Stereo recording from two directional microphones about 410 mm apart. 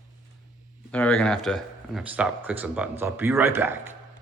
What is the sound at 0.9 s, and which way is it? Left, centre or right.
Speech, centre.